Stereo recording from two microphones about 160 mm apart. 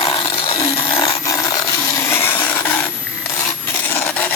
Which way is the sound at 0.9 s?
20° left (ahead or behind).